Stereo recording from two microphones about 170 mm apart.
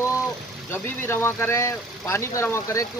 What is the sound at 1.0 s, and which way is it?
Speech, 15° left (ahead or behind).